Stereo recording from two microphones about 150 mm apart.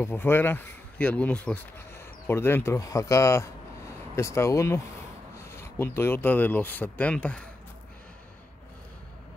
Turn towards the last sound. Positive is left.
turn(degrees=10)  # may be behind; listen again after turning